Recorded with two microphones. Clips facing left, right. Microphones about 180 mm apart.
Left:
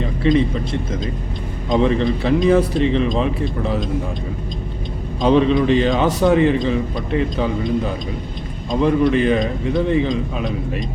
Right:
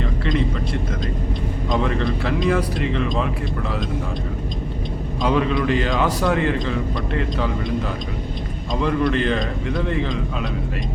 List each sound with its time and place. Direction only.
0.3 s a man's voice: 20° left (ahead or behind)
5.2 s a man's voice: 25° left (ahead or behind)
8.8 s a man's voice: 15° left (ahead or behind)